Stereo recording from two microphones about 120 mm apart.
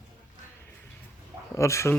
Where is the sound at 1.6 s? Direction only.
25° left (ahead or behind).